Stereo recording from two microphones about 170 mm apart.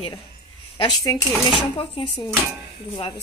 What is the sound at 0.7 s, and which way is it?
Speech, 25° left (ahead or behind).